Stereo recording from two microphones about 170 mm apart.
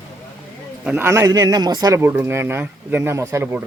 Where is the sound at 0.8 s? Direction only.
10° right (ahead or behind).